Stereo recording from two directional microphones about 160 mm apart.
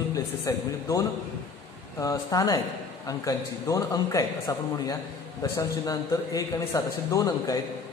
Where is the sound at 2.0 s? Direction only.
25° left (ahead or behind).